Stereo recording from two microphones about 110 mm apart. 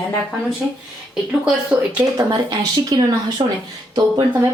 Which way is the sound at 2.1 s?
35° right (ahead or behind).